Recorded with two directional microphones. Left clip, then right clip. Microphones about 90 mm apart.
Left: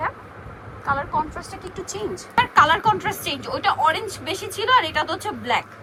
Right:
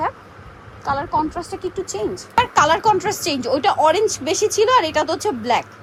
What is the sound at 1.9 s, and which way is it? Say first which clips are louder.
Speech: right 2 dB; 90° right.